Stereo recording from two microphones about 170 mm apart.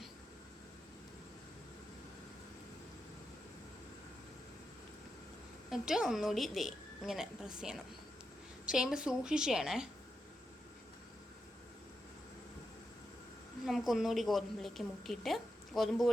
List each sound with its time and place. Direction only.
5.7 s a woman's voice: 5° right (ahead or behind)
13.7 s a woman's voice: centre (ahead or behind)